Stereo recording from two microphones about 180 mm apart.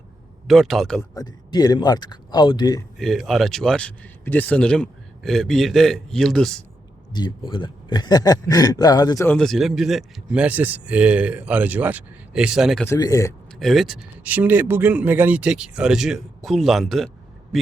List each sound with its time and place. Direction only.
0.4 s speech: centre (ahead or behind)
1.1 s a man's voice: 20° left (ahead or behind)
3.0 s speech: centre (ahead or behind)
7.1 s a man's voice: 25° left (ahead or behind)
9.3 s speech: centre (ahead or behind)
12.9 s a man's voice: 20° left (ahead or behind)
13.6 s speech: centre (ahead or behind)